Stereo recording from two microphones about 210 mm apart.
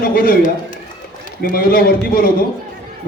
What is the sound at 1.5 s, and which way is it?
Speech, 45° left (ahead or behind).